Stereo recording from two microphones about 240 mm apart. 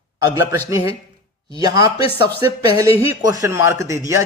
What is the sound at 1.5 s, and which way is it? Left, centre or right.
A man's voice, centre.